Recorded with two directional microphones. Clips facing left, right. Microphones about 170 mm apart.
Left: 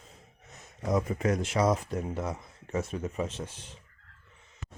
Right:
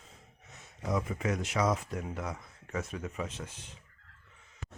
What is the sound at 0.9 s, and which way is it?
Speech, 40° left (ahead or behind).